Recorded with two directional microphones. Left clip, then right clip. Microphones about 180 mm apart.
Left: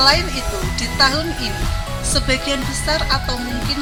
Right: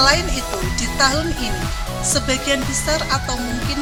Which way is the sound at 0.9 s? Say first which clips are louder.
Left 1 dB; 5° right (ahead or behind).